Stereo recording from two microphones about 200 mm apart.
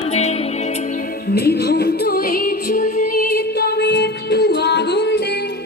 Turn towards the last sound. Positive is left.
turn(degrees=55)  # may be behind; listen again after turning